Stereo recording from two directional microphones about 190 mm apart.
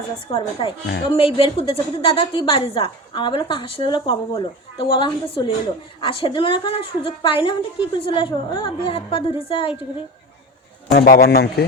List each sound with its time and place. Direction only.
0.3 s a woman's voice: 30° left (ahead or behind)
10.9 s a man's voice: 55° left (ahead or behind)